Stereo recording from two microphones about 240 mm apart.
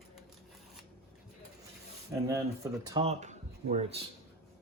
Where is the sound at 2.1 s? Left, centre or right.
Centre.